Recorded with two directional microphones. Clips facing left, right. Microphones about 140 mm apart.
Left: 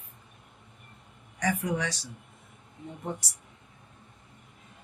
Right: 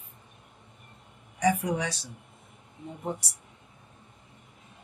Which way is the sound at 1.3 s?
10° right (ahead or behind).